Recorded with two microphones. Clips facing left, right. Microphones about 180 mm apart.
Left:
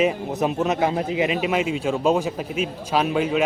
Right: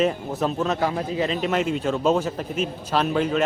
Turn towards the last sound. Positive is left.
turn(degrees=5)  # may be behind; listen again after turning